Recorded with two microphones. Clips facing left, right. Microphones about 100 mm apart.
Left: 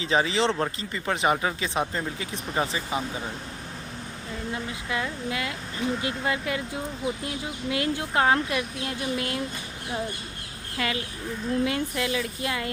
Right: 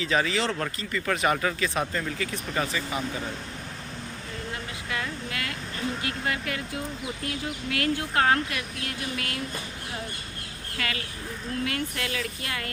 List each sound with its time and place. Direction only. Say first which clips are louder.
0.0 s speech: left 2 dB; 25° left (ahead or behind)
4.9 s speech: left 3 dB; 20° left (ahead or behind)
10.8 s speech: left 4 dB; 25° left (ahead or behind)